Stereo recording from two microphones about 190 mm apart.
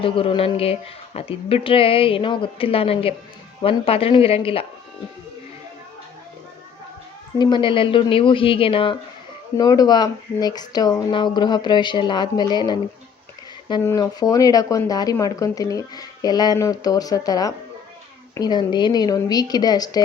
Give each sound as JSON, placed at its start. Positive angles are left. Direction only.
{"t": 0.0, "sound": "speech", "side_deg": 30}
{"t": 7.3, "sound": "speech", "side_deg": 25}